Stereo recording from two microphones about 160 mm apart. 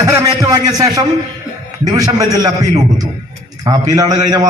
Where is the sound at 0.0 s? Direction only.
25° right (ahead or behind).